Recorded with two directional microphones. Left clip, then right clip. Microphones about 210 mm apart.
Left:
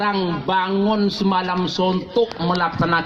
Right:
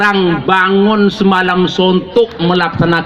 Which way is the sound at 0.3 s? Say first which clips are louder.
Right 9 dB; 30° right (ahead or behind).